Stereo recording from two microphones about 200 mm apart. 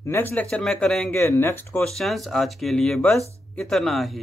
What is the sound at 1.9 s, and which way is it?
Speech, centre (ahead or behind).